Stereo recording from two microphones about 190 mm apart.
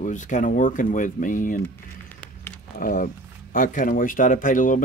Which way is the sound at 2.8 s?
45° left (ahead or behind).